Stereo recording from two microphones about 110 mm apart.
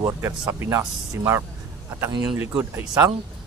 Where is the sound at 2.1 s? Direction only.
40° right (ahead or behind).